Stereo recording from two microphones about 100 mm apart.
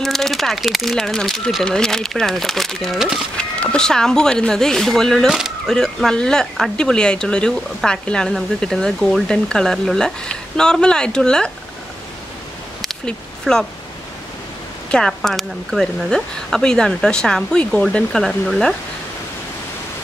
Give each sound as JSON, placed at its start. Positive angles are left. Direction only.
{"t": 0.0, "sound": "speech", "side_deg": 5}
{"t": 12.8, "sound": "a sound", "side_deg": 5}
{"t": 14.9, "sound": "speech", "side_deg": 5}